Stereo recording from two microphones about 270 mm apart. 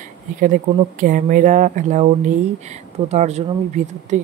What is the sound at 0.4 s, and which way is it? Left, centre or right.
Speech, right.